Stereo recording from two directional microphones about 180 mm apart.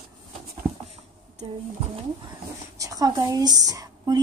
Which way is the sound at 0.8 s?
35° right (ahead or behind).